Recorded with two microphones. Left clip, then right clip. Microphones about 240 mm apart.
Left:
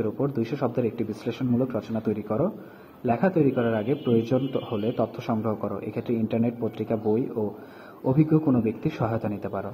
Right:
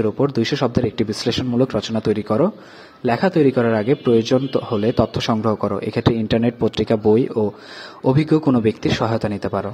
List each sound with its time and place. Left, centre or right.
0.0 s a man's voice: right